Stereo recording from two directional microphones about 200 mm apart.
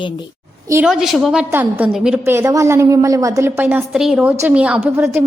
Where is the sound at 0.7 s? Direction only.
5° right (ahead or behind).